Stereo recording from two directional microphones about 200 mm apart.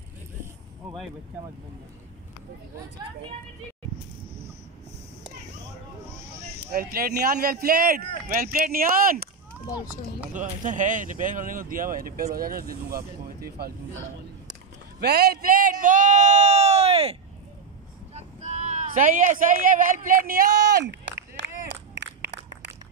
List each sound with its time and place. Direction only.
6.7 s speech: 50° right (ahead or behind)
10.3 s speech: 40° right (ahead or behind)
14.5 s a sound: 50° right (ahead or behind)